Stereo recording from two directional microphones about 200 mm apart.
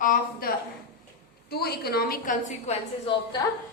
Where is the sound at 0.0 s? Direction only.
45° left (ahead or behind).